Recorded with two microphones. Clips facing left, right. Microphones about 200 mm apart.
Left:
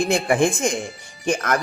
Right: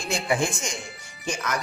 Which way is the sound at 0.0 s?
55° left (ahead or behind).